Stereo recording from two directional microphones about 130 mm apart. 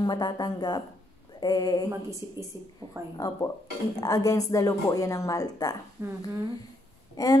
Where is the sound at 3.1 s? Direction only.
30° left (ahead or behind).